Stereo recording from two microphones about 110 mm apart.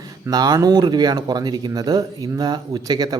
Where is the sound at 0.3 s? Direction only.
35° right (ahead or behind).